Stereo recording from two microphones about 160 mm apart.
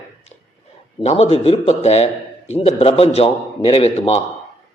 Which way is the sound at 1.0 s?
40° left (ahead or behind).